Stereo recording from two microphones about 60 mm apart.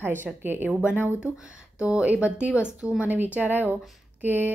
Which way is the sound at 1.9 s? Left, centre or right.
Centre.